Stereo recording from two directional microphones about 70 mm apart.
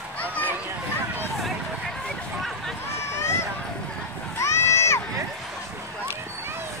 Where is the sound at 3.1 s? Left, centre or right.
Left.